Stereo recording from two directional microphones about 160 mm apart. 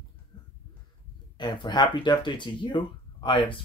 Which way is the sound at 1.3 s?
30° left (ahead or behind).